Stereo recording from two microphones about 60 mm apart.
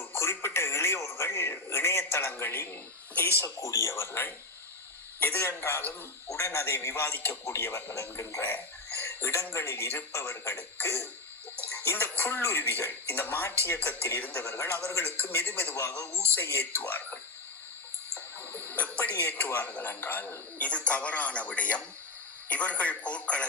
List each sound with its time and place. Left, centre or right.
0.0 s radio: left
3.4 s a man's voice: left
5.5 s speech: left
15.7 s a man's voice: left
16.3 s speech: left
18.3 s a sound: left
19.5 s a man's voice: left